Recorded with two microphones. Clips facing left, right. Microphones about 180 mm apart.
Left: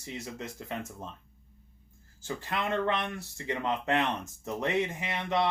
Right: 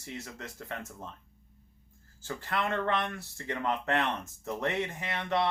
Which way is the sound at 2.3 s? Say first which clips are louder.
Left 1 dB; 15° left (ahead or behind).